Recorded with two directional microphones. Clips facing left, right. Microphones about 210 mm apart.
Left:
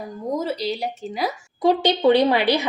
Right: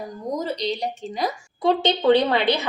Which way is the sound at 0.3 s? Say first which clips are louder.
Left 1 dB; 5° left (ahead or behind).